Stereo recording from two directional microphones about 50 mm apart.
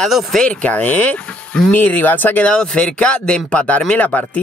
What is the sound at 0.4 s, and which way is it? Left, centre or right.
Speech, left.